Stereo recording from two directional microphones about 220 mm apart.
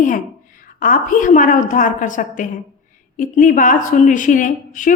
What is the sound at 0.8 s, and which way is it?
A woman's voice, 40° left (ahead or behind).